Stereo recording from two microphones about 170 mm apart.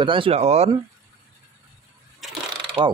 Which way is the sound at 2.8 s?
25° right (ahead or behind).